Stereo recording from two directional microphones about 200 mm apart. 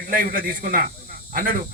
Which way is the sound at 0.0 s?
45° right (ahead or behind).